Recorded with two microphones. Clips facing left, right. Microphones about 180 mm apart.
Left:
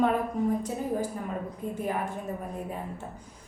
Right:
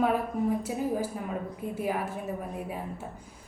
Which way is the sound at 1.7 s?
5° right (ahead or behind).